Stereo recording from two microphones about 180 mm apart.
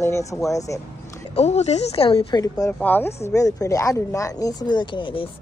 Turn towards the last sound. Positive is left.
turn(degrees=30)  # may be behind; listen again after turning